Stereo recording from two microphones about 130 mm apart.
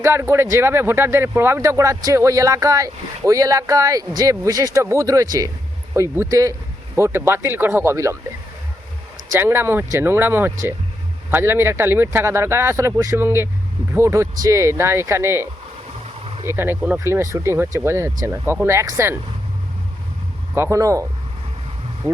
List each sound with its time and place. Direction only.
0.0 s speech: 20° right (ahead or behind)
9.3 s speech: 20° right (ahead or behind)
16.5 s speech: 15° right (ahead or behind)
20.6 s speech: 25° right (ahead or behind)